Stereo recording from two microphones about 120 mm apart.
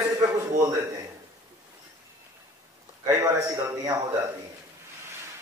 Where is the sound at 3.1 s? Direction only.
25° right (ahead or behind).